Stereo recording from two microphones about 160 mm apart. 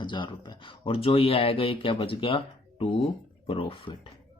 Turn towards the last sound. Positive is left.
turn(degrees=35)  # may be behind; listen again after turning